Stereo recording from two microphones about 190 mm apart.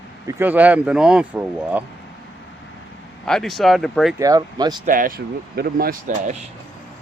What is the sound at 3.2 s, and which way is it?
Speech, centre (ahead or behind).